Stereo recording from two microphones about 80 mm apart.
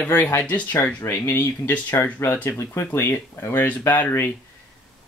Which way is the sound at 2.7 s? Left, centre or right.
Left.